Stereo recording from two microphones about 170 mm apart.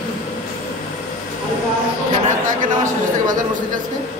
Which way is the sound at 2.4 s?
50° right (ahead or behind).